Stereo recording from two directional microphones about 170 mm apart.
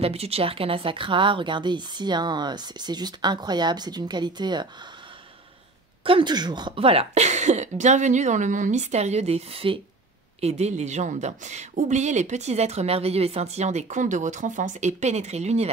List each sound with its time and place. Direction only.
0.0 s a woman's voice: 35° right (ahead or behind)
6.0 s speech: 30° right (ahead or behind)